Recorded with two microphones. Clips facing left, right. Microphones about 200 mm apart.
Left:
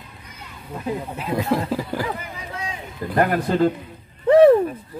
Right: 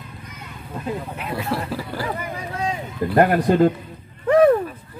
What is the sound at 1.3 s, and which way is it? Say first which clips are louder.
Speech: left 4 dB; 15° left (ahead or behind).